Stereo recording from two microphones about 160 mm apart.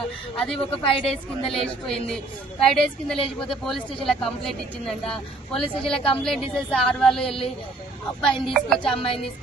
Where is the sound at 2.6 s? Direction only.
5° left (ahead or behind).